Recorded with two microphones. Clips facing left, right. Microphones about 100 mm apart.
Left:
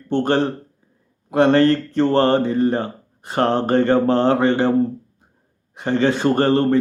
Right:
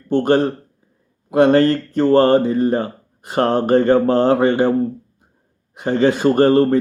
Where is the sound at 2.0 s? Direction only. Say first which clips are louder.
Right 4 dB; 25° left (ahead or behind).